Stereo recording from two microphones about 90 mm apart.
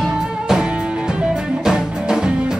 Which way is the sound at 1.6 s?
5° right (ahead or behind).